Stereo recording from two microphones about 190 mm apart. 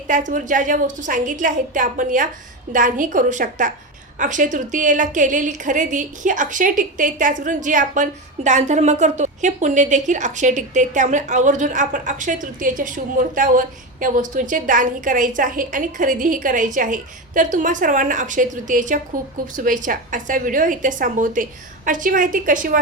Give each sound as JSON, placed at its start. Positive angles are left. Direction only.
{"t": 0.1, "sound": "a woman's voice", "side_deg": -40}